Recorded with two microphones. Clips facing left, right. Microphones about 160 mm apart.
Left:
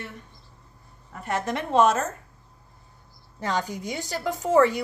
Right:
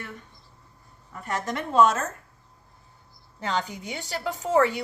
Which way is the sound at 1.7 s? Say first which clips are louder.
Even; 25° left (ahead or behind).